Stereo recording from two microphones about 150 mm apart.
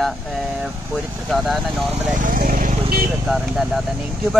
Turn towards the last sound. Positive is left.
turn(degrees=0)  # may be behind; listen again after turning